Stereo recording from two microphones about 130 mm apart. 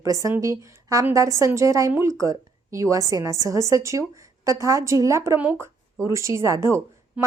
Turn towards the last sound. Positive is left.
turn(degrees=-20)  # may be behind; listen again after turning